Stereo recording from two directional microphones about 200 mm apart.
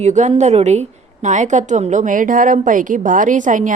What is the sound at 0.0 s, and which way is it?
A woman's voice, 35° right (ahead or behind).